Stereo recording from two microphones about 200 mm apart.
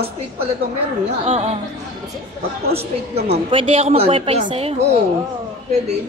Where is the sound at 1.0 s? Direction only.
30° right (ahead or behind).